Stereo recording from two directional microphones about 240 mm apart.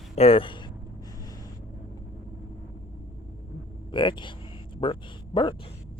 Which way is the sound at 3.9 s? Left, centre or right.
Centre.